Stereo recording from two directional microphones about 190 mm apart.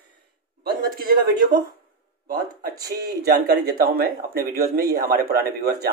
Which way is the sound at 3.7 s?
50° right (ahead or behind).